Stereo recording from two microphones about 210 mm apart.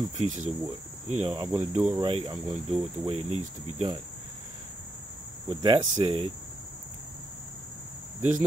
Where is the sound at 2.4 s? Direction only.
5° right (ahead or behind).